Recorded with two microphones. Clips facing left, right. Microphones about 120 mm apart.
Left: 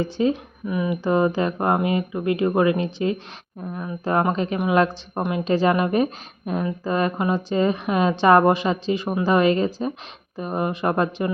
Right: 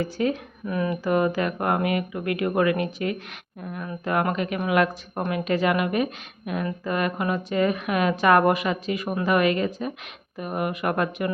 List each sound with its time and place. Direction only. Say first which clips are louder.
0.0 s a woman's voice: left 3 dB; 25° left (ahead or behind)
0.6 s speech: left 1 dB; 10° left (ahead or behind)
1.0 s a woman's voice: left 3 dB; 25° left (ahead or behind)